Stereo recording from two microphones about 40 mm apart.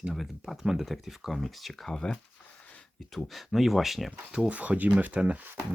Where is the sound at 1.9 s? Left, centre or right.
Left.